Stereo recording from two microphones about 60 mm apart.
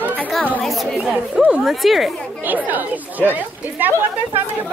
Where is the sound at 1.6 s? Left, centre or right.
Centre.